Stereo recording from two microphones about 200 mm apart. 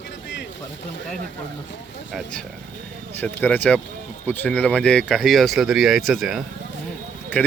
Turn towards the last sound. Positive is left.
turn(degrees=5)  # may be behind; listen again after turning